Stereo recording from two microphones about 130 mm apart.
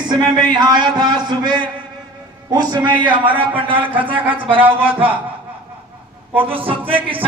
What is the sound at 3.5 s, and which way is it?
Speech, 40° right (ahead or behind).